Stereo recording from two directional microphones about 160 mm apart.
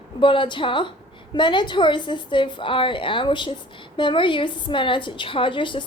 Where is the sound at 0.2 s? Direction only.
30° left (ahead or behind).